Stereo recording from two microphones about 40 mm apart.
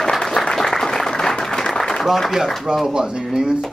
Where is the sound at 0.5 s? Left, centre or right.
Centre.